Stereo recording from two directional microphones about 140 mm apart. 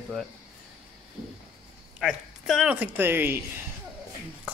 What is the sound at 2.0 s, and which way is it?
Speech, centre (ahead or behind).